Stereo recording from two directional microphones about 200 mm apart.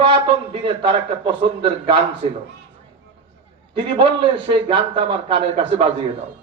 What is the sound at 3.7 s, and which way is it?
A man's voice, 25° right (ahead or behind).